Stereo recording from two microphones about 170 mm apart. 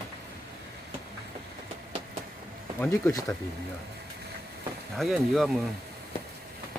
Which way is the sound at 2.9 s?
20° left (ahead or behind).